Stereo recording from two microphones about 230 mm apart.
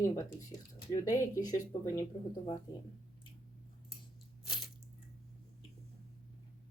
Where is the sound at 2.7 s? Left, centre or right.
Centre.